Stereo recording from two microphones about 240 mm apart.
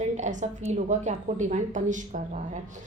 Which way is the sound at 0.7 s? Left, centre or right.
Right.